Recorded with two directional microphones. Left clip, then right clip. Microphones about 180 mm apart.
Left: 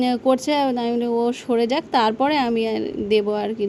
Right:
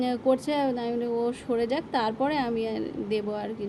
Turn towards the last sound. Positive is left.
turn(degrees=40)  # may be behind; listen again after turning